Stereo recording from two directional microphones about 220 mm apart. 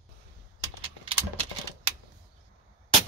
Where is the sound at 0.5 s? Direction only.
25° right (ahead or behind).